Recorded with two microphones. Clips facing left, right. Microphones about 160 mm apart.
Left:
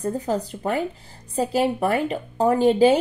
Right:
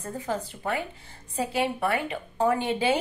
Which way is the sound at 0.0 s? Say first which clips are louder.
Left 7 dB; 40° left (ahead or behind).